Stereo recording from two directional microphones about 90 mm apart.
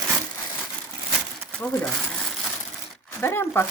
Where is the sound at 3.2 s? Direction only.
25° left (ahead or behind).